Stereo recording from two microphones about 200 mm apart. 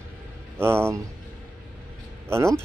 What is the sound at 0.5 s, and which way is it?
Speech, 10° right (ahead or behind).